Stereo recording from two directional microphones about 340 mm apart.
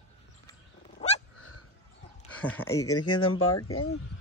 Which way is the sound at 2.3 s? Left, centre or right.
Centre.